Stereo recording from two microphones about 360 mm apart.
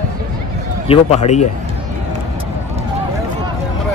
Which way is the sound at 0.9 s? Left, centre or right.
Centre.